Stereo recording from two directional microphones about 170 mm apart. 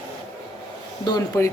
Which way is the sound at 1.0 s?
25° left (ahead or behind).